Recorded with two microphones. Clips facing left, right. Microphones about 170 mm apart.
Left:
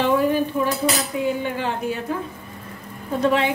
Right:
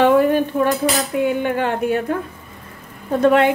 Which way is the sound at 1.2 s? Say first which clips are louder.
Right 5 dB; 60° right (ahead or behind).